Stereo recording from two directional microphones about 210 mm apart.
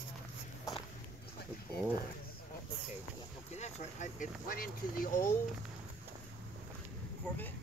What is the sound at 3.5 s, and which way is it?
Speech, 30° left (ahead or behind).